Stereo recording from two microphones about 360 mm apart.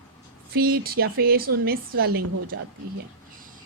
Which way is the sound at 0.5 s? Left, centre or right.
Right.